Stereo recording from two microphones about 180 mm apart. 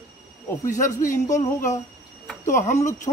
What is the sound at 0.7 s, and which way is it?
Speech, 45° left (ahead or behind).